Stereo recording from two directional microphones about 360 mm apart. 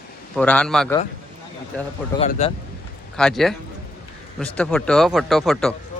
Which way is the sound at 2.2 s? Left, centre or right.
Centre.